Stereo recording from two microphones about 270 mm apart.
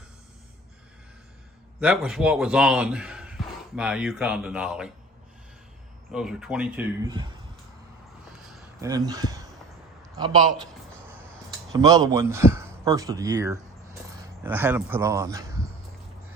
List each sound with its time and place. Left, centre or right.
1.8 s speech: centre
6.1 s speech: centre
8.8 s speech: centre
11.7 s speech: centre